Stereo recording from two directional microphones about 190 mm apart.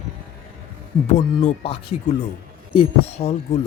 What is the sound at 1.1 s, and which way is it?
Speech, 35° left (ahead or behind).